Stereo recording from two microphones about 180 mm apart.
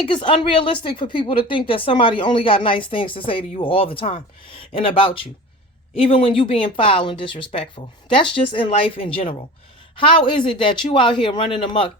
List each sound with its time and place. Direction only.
0.1 s a woman's voice: 30° left (ahead or behind)